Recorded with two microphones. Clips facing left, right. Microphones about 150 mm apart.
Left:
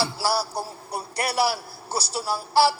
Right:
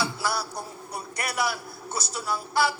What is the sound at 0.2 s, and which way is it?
A man's voice, 30° left (ahead or behind).